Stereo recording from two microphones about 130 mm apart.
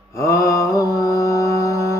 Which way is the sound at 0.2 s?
25° left (ahead or behind).